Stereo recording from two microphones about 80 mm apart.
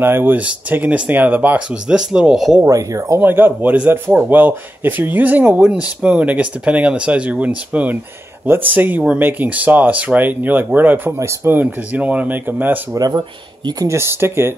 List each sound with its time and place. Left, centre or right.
0.0 s speech: right; by 2.6 s centre
2.6 s speech: right
3.2 s speech: right
13.8 s speech: right